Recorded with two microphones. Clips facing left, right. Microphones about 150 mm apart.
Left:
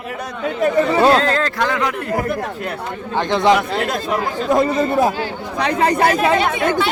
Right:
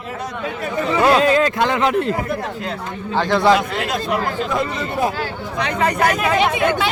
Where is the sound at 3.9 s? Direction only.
45° left (ahead or behind).